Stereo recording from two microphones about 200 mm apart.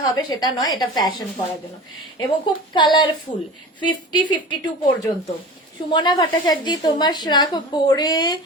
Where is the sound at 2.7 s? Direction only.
20° left (ahead or behind).